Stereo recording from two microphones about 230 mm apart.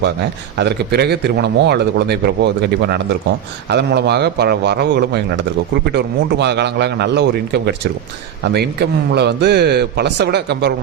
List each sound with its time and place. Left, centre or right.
0.5 s a man's voice: right